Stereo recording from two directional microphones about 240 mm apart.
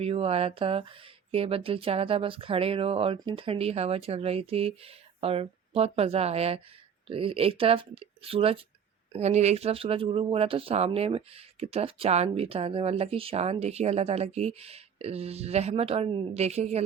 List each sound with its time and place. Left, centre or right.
0.0 s speech: right